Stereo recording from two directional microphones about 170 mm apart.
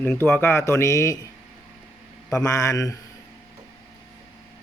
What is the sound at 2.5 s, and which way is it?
Speech, 20° left (ahead or behind).